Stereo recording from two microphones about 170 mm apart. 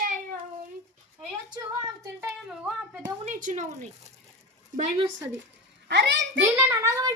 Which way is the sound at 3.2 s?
50° right (ahead or behind).